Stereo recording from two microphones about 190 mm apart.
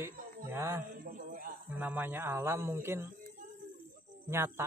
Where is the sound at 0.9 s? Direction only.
45° right (ahead or behind).